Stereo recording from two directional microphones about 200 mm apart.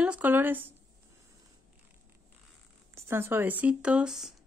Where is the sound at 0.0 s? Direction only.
5° right (ahead or behind).